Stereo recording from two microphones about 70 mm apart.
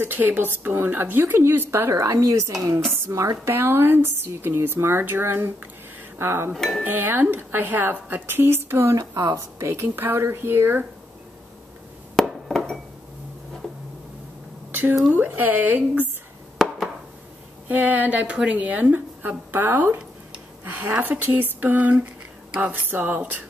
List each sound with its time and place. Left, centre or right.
0.0 s a woman's voice: right
3.5 s a woman's voice: right
6.1 s dishes: right
6.5 s dishes: centre
6.8 s a woman's voice: right
12.2 s glass: centre
14.7 s a sound: right
15.1 s a woman's voice: right
17.6 s a woman's voice: right